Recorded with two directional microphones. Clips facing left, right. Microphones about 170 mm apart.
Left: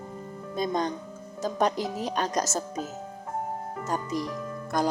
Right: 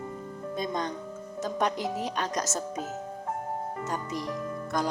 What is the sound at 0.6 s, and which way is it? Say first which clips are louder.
Speech: left 4 dB; 35° left (ahead or behind).